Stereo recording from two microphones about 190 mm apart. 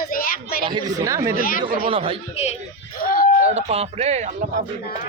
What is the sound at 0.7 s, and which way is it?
Speech, 20° right (ahead or behind).